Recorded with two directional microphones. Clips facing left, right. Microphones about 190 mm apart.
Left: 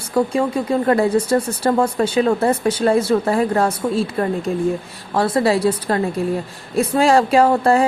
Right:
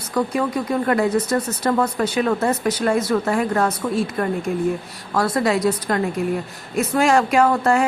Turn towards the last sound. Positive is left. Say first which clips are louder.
# left 3 dB
turn(degrees=30)  # may be behind; listen again after turning